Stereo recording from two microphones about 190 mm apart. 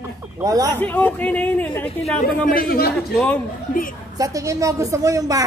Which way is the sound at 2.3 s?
50° left (ahead or behind).